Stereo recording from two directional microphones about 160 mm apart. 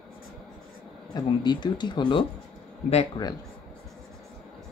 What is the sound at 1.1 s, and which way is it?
Speech, 25° left (ahead or behind).